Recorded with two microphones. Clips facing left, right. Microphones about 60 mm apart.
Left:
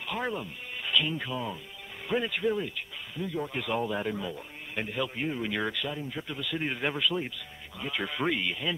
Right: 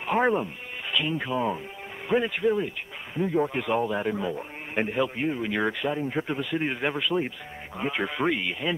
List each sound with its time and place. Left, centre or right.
0.0 s speech: right
0.9 s speech: centre
2.0 s speech: centre
3.2 s speech: right
5.0 s speech: centre
8.0 s speech: centre